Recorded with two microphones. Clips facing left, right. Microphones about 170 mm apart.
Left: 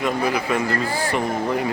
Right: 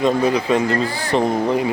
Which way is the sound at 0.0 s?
25° right (ahead or behind).